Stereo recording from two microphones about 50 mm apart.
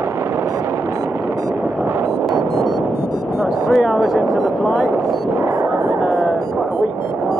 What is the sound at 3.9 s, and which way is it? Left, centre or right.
Speech, centre.